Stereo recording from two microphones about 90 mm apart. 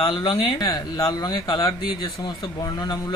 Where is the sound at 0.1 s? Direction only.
75° left (ahead or behind).